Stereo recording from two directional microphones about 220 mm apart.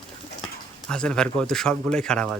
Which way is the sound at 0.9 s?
5° left (ahead or behind).